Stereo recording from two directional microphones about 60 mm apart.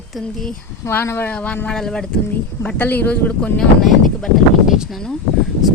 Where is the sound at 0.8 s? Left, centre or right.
Left.